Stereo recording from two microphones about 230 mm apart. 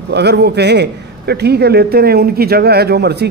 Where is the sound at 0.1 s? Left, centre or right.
Right.